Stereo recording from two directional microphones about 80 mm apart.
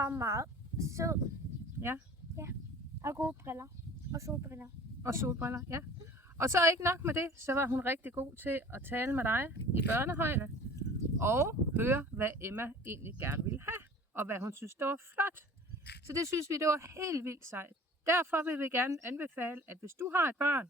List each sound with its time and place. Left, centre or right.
0.0 s speech: right
1.8 s a sound: right
3.0 s speech: right
16.0 s speech: right